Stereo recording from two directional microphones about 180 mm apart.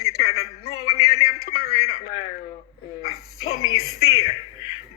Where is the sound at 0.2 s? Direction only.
35° left (ahead or behind).